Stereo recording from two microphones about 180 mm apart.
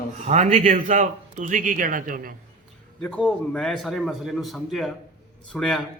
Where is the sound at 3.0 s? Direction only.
5° left (ahead or behind).